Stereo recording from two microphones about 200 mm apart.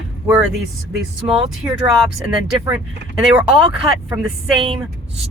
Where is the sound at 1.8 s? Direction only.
5° right (ahead or behind).